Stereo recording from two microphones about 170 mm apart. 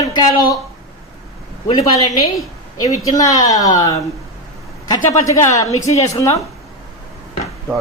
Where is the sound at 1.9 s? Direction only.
20° left (ahead or behind).